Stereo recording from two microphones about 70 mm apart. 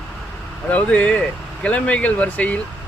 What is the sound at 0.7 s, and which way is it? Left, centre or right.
Speech, centre.